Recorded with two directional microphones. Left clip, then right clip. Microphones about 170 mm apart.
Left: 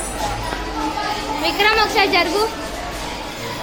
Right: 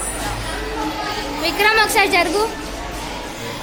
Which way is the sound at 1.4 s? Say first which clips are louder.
Right 1 dB; 10° right (ahead or behind).